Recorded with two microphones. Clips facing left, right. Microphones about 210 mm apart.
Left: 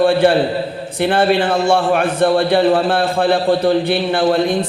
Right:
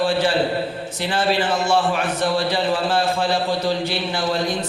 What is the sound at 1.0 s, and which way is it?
A man's voice, 60° left (ahead or behind).